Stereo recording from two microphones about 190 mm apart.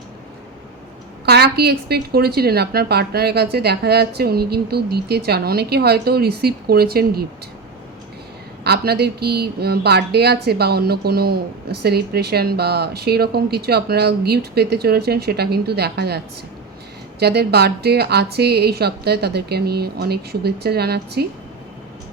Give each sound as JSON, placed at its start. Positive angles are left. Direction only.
{"t": 1.2, "sound": "speech", "side_deg": -60}
{"t": 8.6, "sound": "speech", "side_deg": -55}